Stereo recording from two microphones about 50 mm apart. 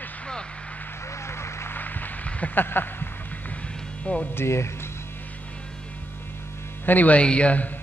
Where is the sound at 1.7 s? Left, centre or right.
Left.